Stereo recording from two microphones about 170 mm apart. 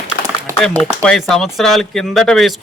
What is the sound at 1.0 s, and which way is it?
A man's voice, 5° left (ahead or behind).